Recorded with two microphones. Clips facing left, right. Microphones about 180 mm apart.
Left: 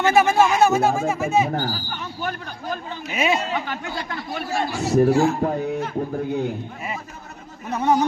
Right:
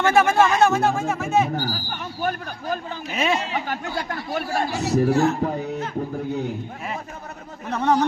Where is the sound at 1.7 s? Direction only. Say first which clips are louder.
Even; 45° right (ahead or behind).